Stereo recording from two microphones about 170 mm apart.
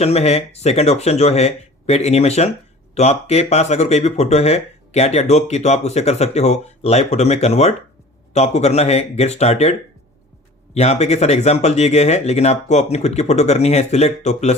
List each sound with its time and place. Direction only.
0.0 s speech: 35° left (ahead or behind)
10.8 s speech: 40° left (ahead or behind)